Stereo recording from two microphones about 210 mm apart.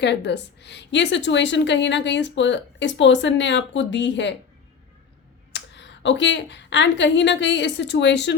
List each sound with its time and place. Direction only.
0.0 s a woman's voice: 55° left (ahead or behind)
5.5 s a woman's voice: 55° left (ahead or behind)